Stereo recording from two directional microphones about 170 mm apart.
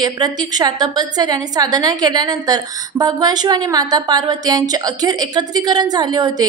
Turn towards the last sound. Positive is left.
turn(degrees=-25)  # may be behind; listen again after turning